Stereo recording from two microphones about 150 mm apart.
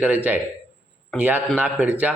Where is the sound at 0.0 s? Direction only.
10° right (ahead or behind).